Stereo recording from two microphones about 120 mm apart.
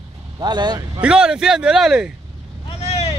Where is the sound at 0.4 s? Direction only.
35° right (ahead or behind).